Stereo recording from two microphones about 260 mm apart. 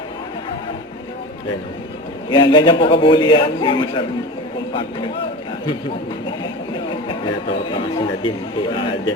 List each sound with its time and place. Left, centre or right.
2.3 s speech: centre
7.1 s speech: centre